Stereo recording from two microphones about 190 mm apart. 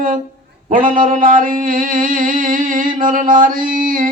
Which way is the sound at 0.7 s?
45° right (ahead or behind).